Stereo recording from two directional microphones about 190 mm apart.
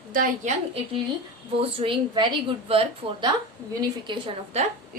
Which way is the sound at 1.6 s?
30° right (ahead or behind).